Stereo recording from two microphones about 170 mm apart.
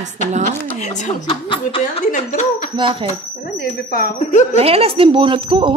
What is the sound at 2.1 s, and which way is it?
Speech, 50° left (ahead or behind).